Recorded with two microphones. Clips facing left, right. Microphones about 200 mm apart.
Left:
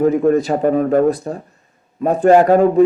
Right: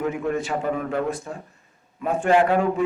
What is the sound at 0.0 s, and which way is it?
Speech, 40° left (ahead or behind).